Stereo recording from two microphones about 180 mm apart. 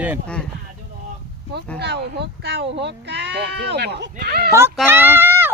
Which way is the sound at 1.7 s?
70° right (ahead or behind).